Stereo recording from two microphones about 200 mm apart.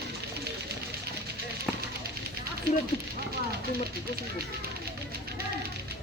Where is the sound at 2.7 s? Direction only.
45° right (ahead or behind).